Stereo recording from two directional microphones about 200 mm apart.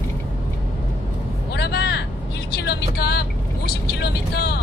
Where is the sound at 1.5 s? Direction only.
55° left (ahead or behind).